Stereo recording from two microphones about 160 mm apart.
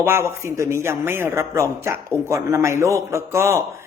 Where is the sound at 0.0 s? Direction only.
15° right (ahead or behind).